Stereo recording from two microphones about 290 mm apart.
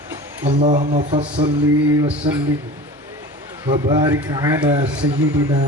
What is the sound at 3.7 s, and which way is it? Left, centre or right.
A man's voice, centre.